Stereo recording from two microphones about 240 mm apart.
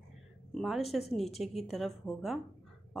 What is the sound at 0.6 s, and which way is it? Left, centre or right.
A woman's voice, centre.